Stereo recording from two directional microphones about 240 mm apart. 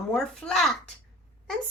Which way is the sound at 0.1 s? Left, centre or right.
Centre.